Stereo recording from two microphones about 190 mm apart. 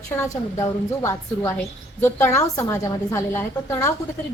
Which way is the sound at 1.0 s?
15° left (ahead or behind).